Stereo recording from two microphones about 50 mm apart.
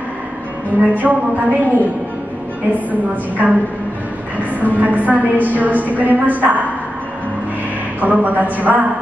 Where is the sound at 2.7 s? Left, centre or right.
Right.